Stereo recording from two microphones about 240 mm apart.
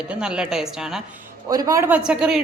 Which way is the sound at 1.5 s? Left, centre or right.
Centre.